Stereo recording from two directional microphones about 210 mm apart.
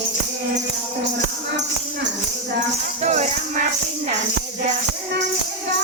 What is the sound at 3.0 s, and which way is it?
Music, 35° right (ahead or behind).